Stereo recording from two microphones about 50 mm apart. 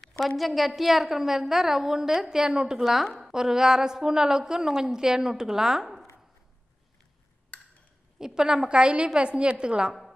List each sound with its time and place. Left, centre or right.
0.4 s a woman's voice: centre
2.8 s a woman's voice: centre
8.4 s a woman's voice: centre